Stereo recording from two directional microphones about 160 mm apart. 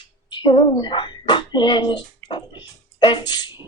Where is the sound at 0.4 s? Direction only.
30° left (ahead or behind).